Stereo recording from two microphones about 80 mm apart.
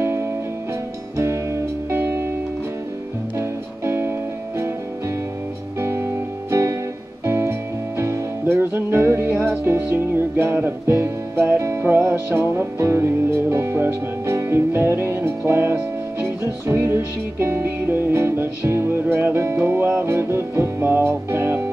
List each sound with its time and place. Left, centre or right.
0.0 s music: right
3.3 s music: right
5.8 s music: right